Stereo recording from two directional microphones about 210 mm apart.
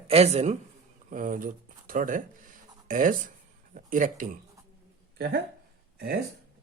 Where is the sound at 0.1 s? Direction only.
30° right (ahead or behind).